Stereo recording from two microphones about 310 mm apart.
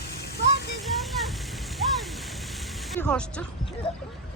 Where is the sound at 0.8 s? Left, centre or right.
Centre.